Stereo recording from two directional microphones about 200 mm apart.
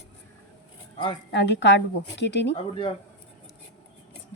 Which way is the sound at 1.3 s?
60° left (ahead or behind).